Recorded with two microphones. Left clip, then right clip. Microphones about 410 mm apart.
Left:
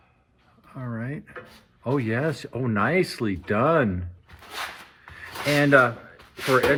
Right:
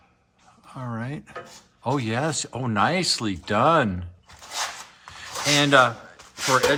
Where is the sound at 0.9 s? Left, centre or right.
Centre.